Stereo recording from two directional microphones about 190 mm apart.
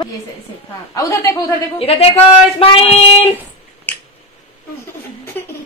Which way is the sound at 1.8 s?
30° left (ahead or behind).